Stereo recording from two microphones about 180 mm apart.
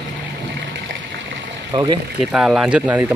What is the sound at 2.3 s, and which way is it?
Speech, 5° right (ahead or behind).